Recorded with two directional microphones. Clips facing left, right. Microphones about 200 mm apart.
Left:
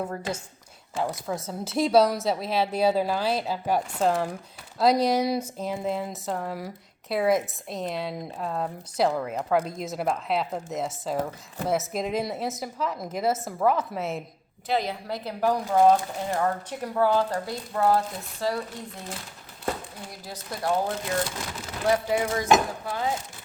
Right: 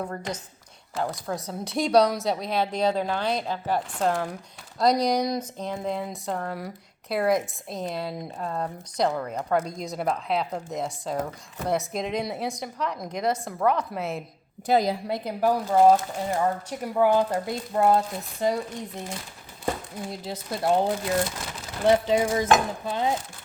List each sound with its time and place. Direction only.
0.0 s a woman's voice: 5° left (ahead or behind)
14.7 s a woman's voice: 40° right (ahead or behind)
15.0 s speech: 20° right (ahead or behind)